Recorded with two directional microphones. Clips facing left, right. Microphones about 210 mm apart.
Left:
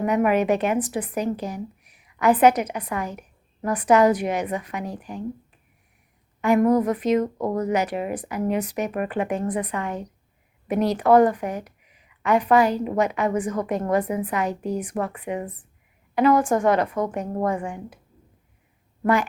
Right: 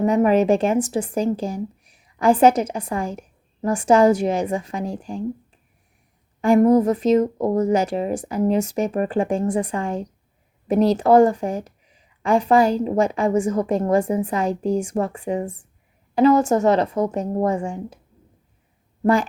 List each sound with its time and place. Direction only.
0.0 s a woman's voice: 30° right (ahead or behind)
6.4 s a woman's voice: 30° right (ahead or behind)